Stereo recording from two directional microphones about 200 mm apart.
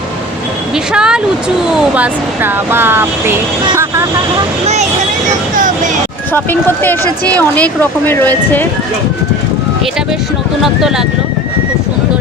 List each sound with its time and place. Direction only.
0.9 s speech: 5° right (ahead or behind)
4.6 s speech: 35° right (ahead or behind)
5.5 s a sound: 40° right (ahead or behind)
6.3 s speech: 10° left (ahead or behind)
10.6 s speech: centre (ahead or behind)